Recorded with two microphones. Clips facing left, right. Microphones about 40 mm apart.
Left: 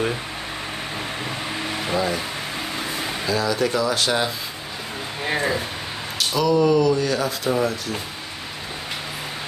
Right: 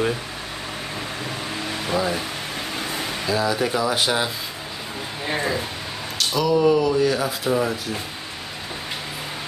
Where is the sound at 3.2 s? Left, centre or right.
Centre.